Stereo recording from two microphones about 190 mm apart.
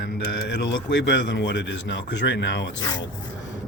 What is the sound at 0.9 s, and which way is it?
Speech, 65° left (ahead or behind).